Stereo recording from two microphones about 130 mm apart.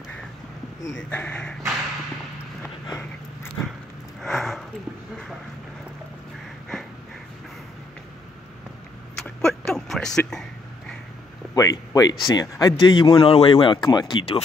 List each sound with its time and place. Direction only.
1.1 s speech: 10° left (ahead or behind)
3.6 s dog: 25° left (ahead or behind)
4.2 s a sound: centre (ahead or behind)
9.1 s a sound: 5° left (ahead or behind)
11.5 s speech: 25° left (ahead or behind)
12.8 s speech: 40° left (ahead or behind)